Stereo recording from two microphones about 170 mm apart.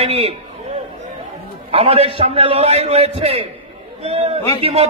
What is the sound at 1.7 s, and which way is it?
A man's voice, 35° right (ahead or behind).